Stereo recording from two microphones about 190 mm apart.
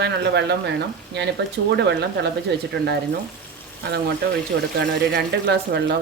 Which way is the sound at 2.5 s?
65° right (ahead or behind).